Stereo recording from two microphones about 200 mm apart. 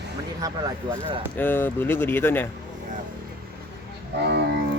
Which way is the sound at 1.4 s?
10° left (ahead or behind).